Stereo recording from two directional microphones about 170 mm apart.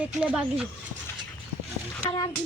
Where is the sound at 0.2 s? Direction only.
5° right (ahead or behind).